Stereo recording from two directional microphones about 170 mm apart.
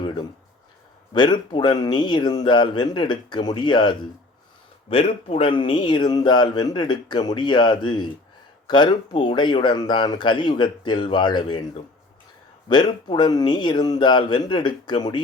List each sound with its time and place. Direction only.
1.1 s speech: 25° left (ahead or behind)
12.6 s speech: 25° left (ahead or behind)